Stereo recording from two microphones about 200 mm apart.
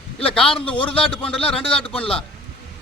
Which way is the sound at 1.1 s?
25° left (ahead or behind).